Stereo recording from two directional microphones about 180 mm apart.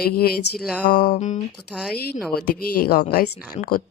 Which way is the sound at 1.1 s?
40° left (ahead or behind).